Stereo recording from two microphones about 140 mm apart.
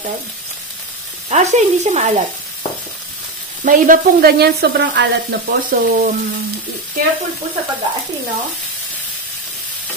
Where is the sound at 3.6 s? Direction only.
75° right (ahead or behind).